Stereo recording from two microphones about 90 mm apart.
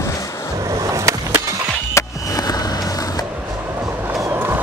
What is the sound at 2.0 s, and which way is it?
Skateboard, 45° left (ahead or behind).